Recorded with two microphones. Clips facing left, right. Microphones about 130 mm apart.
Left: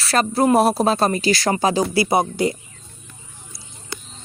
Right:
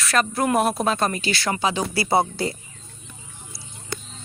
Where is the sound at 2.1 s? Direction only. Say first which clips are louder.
Left 2 dB; 20° left (ahead or behind).